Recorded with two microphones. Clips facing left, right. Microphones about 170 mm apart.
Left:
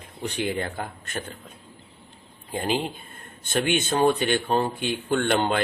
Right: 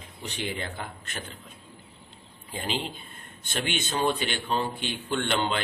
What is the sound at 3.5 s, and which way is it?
Speech, 50° left (ahead or behind).